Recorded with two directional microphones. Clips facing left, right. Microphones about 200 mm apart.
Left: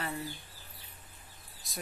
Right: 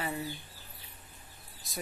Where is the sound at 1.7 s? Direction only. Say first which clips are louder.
Right 3 dB; centre (ahead or behind).